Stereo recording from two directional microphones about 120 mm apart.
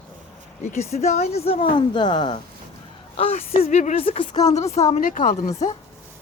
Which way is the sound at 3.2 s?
55° left (ahead or behind).